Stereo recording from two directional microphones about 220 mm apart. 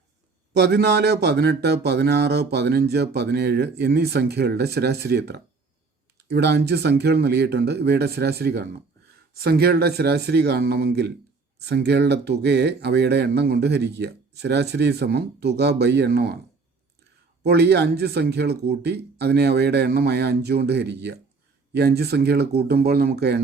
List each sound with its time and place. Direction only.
0.5 s speech: 50° right (ahead or behind)
17.4 s speech: 50° right (ahead or behind)